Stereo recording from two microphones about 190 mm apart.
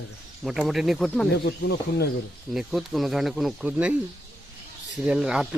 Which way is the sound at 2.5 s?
Centre (ahead or behind).